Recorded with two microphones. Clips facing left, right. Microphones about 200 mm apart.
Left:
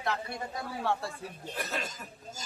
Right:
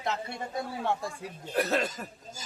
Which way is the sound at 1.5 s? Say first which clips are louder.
Right 10 dB; 65° right (ahead or behind).